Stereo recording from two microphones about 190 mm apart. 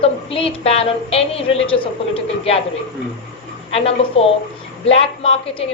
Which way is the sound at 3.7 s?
30° left (ahead or behind).